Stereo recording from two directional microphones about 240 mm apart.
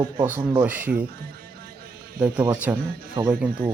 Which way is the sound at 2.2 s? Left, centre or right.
Centre.